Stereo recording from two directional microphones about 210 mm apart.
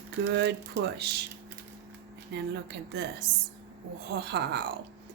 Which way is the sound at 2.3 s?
55° right (ahead or behind).